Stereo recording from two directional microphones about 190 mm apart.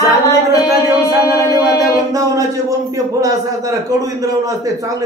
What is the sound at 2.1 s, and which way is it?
A man's voice, 20° right (ahead or behind).